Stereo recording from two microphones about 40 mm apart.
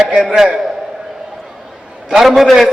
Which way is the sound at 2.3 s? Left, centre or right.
Centre.